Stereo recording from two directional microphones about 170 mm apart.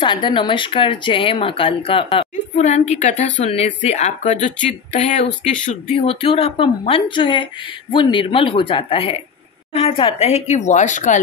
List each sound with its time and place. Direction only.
0.0 s a woman's voice: 30° left (ahead or behind)
2.5 s a woman's voice: 45° left (ahead or behind)